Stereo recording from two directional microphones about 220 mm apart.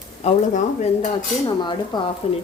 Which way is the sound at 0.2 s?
30° left (ahead or behind).